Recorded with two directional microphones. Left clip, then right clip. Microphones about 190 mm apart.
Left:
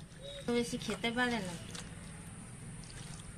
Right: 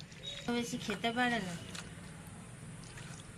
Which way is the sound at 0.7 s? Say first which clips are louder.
Right 1 dB; 25° left (ahead or behind).